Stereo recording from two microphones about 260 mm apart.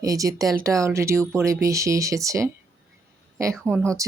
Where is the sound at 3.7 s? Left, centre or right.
Centre.